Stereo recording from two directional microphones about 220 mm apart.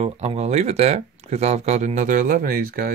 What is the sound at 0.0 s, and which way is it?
Speech, 30° right (ahead or behind).